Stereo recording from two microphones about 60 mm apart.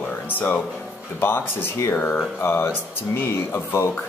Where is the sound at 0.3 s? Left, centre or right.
Left.